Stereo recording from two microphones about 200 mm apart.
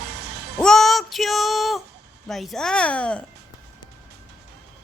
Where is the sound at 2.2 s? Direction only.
Centre (ahead or behind).